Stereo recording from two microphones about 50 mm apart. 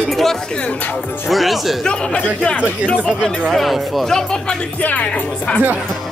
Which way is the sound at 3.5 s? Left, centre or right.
Centre.